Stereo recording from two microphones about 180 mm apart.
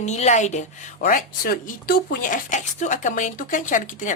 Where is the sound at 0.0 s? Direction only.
40° left (ahead or behind).